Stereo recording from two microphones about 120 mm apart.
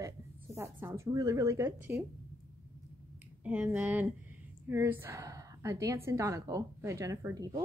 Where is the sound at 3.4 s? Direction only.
15° right (ahead or behind).